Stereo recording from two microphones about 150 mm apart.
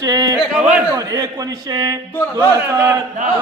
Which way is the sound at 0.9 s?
25° right (ahead or behind).